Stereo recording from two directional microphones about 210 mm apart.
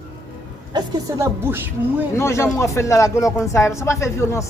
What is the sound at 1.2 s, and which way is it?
Speech, 10° right (ahead or behind).